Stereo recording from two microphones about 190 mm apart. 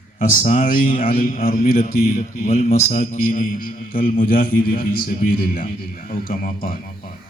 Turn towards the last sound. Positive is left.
turn(degrees=50)  # may be behind; listen again after turning